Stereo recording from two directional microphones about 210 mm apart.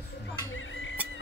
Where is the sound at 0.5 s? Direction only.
65° left (ahead or behind).